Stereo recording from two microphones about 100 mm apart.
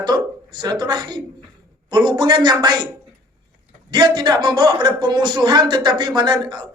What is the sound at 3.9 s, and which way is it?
Speech, 45° right (ahead or behind).